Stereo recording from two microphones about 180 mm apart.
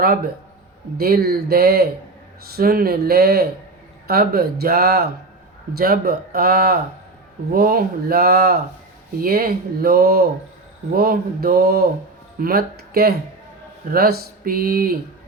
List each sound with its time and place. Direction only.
0.9 s speech: 60° right (ahead or behind)